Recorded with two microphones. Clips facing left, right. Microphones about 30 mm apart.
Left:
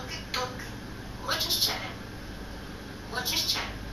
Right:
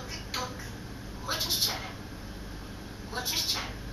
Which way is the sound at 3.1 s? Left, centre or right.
Centre.